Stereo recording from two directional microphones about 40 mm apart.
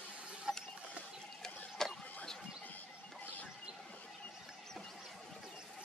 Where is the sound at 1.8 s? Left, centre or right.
Centre.